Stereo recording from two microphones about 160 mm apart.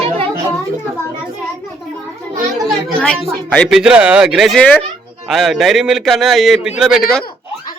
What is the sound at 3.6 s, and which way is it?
A man's voice, 5° right (ahead or behind).